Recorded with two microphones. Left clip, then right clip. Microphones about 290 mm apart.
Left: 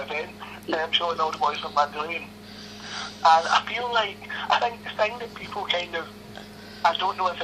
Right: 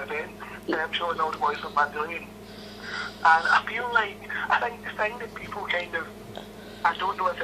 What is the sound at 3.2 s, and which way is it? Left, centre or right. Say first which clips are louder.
Speech: left 1 dB; left.